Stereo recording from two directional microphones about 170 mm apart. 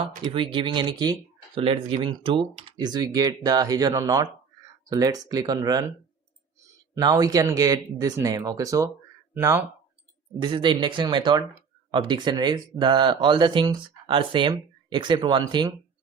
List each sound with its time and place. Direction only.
0.2 s speech: 30° right (ahead or behind)
6.9 s speech: 20° right (ahead or behind)
10.4 s speech: 30° right (ahead or behind)